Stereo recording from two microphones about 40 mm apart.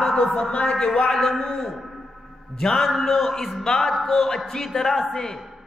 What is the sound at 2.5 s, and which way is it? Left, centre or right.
A man's voice, centre.